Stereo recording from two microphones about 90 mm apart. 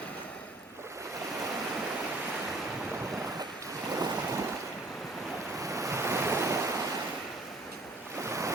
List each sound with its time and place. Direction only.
3.9 s waves: 40° right (ahead or behind)
5.5 s waves: 35° right (ahead or behind)
8.2 s waves: 35° right (ahead or behind)